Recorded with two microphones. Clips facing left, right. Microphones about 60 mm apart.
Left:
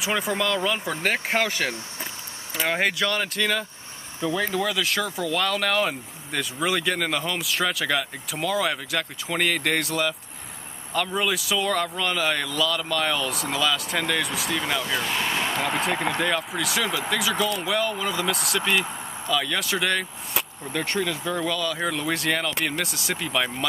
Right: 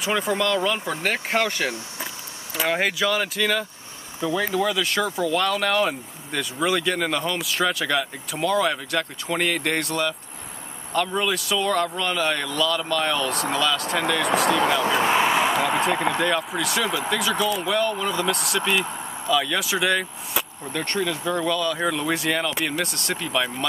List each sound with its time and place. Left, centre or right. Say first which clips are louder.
0.0 s speech: right 2 dB; centre
14.4 s speech: right 8 dB; right
14.8 s speech: right 7 dB; right
15.2 s speech: right 5 dB; centre